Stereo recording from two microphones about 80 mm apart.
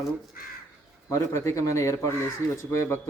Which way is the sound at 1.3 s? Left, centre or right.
Left.